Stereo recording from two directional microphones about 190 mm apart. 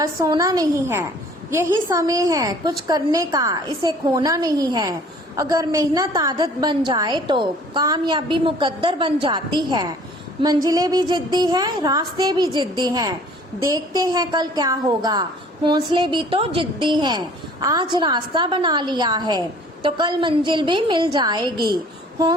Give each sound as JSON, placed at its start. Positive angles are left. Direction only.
{"t": 0.0, "sound": "a woman's voice", "side_deg": -15}